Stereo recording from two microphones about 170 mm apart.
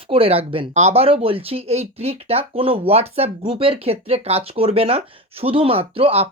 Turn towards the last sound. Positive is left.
turn(degrees=-35)  # may be behind; listen again after turning